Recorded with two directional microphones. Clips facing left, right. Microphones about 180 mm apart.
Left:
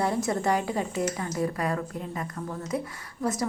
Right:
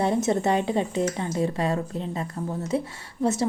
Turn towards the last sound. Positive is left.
turn(degrees=-25)  # may be behind; listen again after turning